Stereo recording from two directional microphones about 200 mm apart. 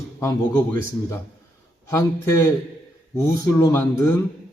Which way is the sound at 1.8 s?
15° left (ahead or behind).